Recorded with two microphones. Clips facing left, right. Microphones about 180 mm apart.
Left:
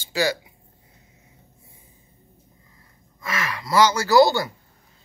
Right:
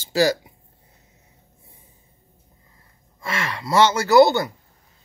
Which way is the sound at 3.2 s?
30° right (ahead or behind).